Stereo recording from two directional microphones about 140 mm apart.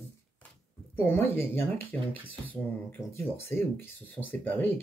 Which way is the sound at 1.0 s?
15° left (ahead or behind).